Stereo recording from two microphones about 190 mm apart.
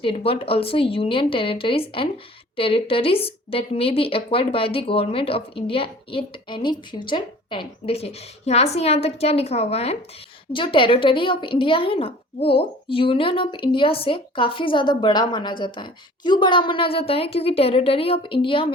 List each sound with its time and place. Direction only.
0.0 s a woman's voice: 30° left (ahead or behind)